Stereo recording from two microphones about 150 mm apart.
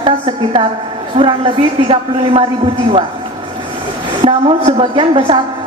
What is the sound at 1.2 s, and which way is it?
A man's voice, 35° right (ahead or behind).